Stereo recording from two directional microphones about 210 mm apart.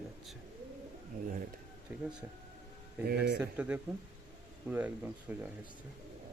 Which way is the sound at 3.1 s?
50° right (ahead or behind).